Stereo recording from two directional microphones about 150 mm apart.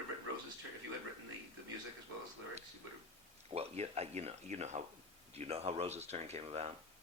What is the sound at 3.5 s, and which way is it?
Speech, 45° right (ahead or behind).